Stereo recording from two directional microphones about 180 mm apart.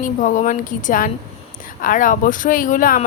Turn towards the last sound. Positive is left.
turn(degrees=50)  # may be behind; listen again after turning